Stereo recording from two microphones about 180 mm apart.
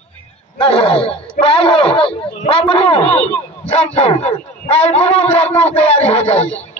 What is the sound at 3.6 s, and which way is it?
Dog, 35° left (ahead or behind).